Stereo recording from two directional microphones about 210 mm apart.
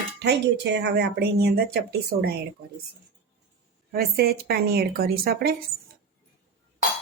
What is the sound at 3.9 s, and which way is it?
Speech, 50° right (ahead or behind).